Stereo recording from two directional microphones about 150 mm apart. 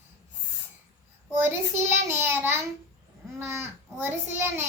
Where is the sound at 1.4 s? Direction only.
15° right (ahead or behind).